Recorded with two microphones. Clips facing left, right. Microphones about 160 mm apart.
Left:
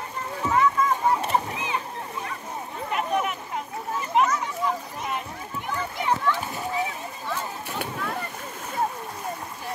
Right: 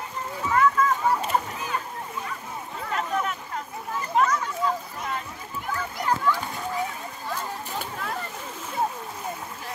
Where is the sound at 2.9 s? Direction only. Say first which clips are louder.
Left 2 dB; 15° left (ahead or behind).